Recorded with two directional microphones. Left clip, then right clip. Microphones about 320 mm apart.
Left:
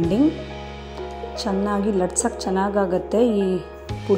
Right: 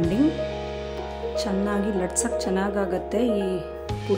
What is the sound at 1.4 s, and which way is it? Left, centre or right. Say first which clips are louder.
Speech: left 3 dB; centre.